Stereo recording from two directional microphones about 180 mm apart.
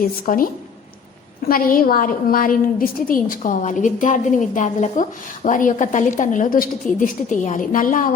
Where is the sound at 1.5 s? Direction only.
50° left (ahead or behind).